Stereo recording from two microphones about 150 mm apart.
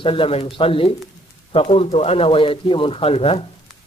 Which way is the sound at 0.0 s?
35° left (ahead or behind).